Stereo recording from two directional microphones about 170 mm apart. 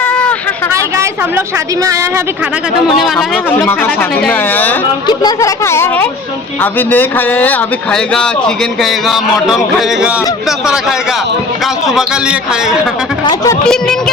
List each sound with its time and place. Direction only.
0.0 s a sound: 10° left (ahead or behind)
0.7 s a woman's voice: 15° right (ahead or behind)
3.0 s a man's voice: centre (ahead or behind)
5.0 s a man's voice: 20° left (ahead or behind); by 12.9 s 5° right (ahead or behind)
13.2 s speech: 20° left (ahead or behind)
13.7 s a man's voice: 5° left (ahead or behind)